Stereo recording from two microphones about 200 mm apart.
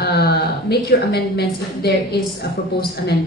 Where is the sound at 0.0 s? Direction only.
50° left (ahead or behind).